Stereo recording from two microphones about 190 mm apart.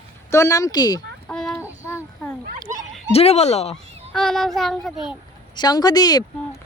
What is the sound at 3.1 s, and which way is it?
Speech, 35° left (ahead or behind).